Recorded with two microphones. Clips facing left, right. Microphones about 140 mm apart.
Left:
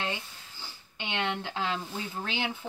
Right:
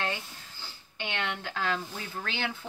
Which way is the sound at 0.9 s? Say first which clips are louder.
Left 2 dB; 25° left (ahead or behind).